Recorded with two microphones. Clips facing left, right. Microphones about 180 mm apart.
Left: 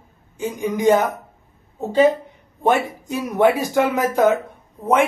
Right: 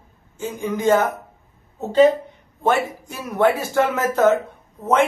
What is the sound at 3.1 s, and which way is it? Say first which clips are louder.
Speech: left 3 dB; 15° left (ahead or behind).